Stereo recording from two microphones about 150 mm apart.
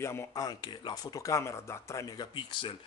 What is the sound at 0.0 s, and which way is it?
Speech, 20° left (ahead or behind).